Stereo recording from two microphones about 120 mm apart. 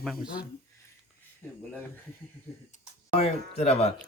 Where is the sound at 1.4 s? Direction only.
20° left (ahead or behind).